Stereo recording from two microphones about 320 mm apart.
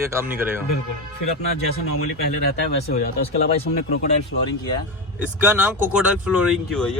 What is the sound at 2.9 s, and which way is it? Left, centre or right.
Speech, left.